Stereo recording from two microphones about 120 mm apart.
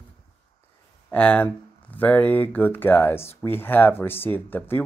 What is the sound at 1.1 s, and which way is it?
Speech, 10° left (ahead or behind).